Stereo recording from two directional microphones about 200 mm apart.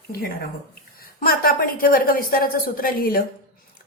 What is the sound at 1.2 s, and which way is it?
A woman's voice, 45° left (ahead or behind).